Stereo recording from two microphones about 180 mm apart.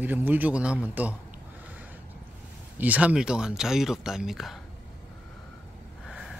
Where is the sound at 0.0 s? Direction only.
10° right (ahead or behind).